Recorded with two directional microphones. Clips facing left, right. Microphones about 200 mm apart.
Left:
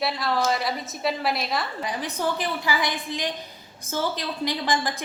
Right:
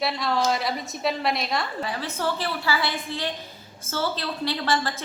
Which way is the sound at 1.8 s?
15° left (ahead or behind).